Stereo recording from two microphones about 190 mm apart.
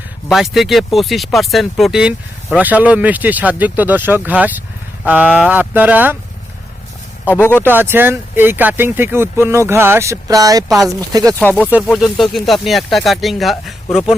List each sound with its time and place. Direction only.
0.3 s speech: centre (ahead or behind)
7.3 s speech: 10° left (ahead or behind)
7.6 s speech: 10° right (ahead or behind)
11.3 s speech: 10° left (ahead or behind)